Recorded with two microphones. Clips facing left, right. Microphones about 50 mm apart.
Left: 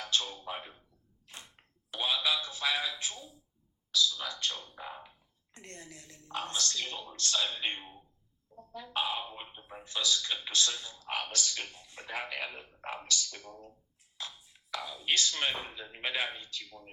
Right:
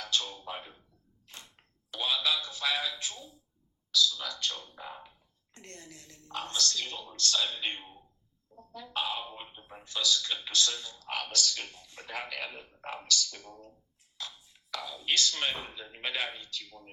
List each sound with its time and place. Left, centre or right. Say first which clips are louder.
0.0 s music: even; left
0.3 s speech: even; centre
1.3 s a sound: even; left
1.9 s speech: even; left
4.5 s speech: even; centre
5.5 s speech: left 1 dB; left; by 7.6 s centre
7.6 s speech: even; left
9.8 s speech: right 2 dB; left